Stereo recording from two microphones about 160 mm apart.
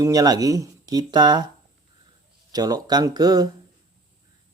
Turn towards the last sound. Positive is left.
turn(degrees=-25)  # may be behind; listen again after turning